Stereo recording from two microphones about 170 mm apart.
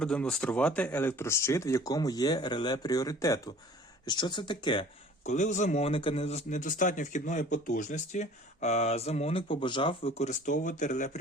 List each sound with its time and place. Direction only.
0.0 s speech: 5° left (ahead or behind); by 4.9 s 30° left (ahead or behind)
5.2 s speech: 45° left (ahead or behind)